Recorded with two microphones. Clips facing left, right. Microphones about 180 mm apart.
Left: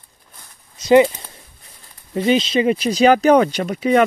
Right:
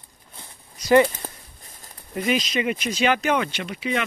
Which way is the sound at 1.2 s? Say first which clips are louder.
Right 6 dB; 45° right (ahead or behind).